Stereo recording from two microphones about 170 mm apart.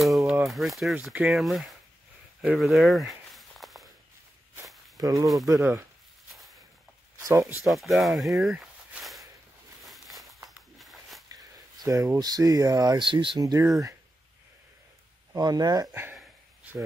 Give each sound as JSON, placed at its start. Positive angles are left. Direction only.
{"t": 0.0, "sound": "a sound", "side_deg": 0}
{"t": 0.5, "sound": "speech", "side_deg": 0}
{"t": 2.4, "sound": "a sound", "side_deg": 0}
{"t": 4.9, "sound": "speech", "side_deg": -20}
{"t": 7.2, "sound": "speech", "side_deg": -15}
{"t": 7.6, "sound": "speech", "side_deg": 0}
{"t": 9.8, "sound": "a sound", "side_deg": 0}
{"t": 11.8, "sound": "speech", "side_deg": -20}
{"t": 15.3, "sound": "speech", "side_deg": -25}